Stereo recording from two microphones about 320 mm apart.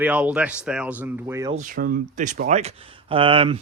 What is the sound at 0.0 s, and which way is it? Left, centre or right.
Speech, centre.